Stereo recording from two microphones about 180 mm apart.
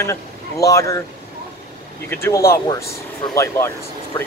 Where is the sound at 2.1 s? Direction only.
15° left (ahead or behind).